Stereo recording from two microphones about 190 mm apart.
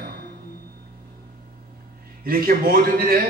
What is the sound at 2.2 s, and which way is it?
A man's voice, 50° right (ahead or behind).